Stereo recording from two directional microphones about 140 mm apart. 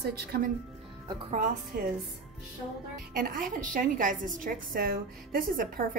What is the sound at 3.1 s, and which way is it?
A woman's voice, 90° right.